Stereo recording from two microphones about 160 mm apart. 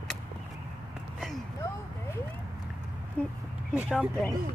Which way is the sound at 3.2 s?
10° left (ahead or behind).